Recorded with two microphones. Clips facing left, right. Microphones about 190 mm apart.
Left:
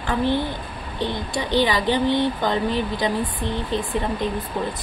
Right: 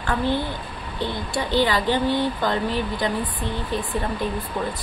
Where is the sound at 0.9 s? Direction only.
20° left (ahead or behind).